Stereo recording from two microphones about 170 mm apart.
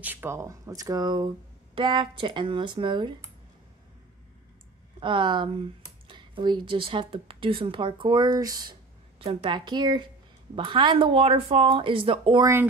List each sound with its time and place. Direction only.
0.0 s speech: 10° right (ahead or behind); by 3.2 s 30° right (ahead or behind)
5.0 s speech: 30° right (ahead or behind)